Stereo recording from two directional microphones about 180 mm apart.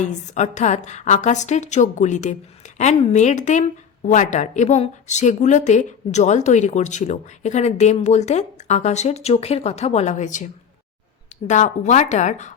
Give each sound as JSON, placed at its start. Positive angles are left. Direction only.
{"t": 0.0, "sound": "speech", "side_deg": 40}
{"t": 11.4, "sound": "speech", "side_deg": 40}